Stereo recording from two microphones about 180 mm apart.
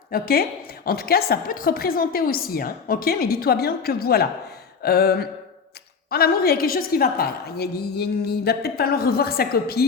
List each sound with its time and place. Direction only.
0.1 s a woman's voice: 55° left (ahead or behind)